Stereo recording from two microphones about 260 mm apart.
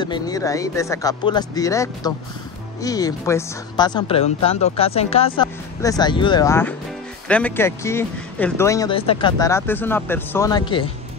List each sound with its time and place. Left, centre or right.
0.0 s speech: centre